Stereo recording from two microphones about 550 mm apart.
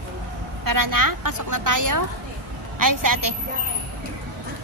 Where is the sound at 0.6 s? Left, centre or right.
Right.